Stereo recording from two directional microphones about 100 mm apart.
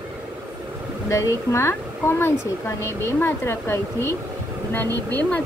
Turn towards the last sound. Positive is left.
turn(degrees=15)  # may be behind; listen again after turning